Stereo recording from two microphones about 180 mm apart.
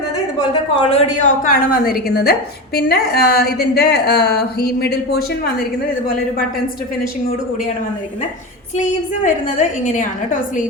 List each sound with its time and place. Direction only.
0.8 s speech: 35° left (ahead or behind)
1.5 s a woman's voice: 55° left (ahead or behind)
8.7 s a woman's voice: 45° left (ahead or behind)